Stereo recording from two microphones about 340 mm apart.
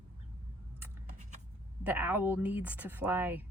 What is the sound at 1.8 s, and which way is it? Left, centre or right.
Speech, centre.